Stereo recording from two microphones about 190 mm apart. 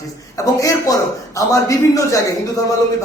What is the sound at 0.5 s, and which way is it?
A man's voice, 15° left (ahead or behind).